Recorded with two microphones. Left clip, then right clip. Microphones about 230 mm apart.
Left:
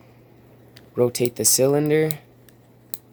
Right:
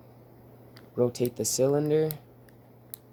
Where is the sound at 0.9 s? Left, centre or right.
Left.